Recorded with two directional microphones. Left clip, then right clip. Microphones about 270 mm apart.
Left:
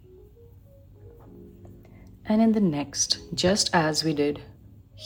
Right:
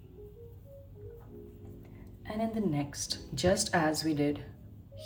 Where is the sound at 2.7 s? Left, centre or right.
Centre.